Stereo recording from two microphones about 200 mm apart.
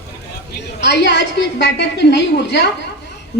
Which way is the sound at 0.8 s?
60° left (ahead or behind).